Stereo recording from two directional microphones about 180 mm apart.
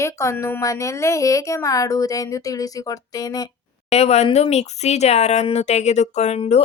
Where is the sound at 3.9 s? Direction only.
35° left (ahead or behind).